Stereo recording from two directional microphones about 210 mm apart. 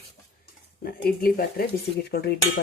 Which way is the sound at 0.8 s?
45° left (ahead or behind).